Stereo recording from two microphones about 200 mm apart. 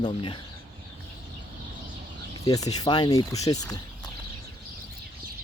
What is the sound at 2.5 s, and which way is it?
Speech, 20° left (ahead or behind).